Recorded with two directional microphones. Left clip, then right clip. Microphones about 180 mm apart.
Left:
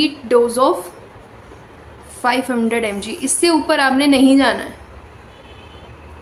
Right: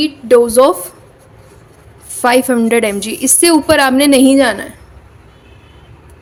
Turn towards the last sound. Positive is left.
turn(degrees=-50)  # may be behind; listen again after turning